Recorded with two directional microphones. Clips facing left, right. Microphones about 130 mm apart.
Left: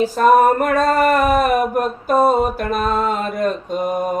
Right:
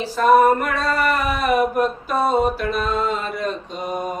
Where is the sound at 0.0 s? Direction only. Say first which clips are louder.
Left 2 dB; 45° left (ahead or behind).